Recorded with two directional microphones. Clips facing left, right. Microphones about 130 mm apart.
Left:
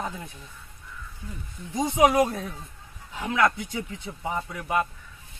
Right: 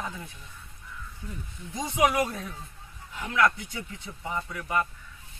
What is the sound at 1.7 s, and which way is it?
Speech, 25° left (ahead or behind).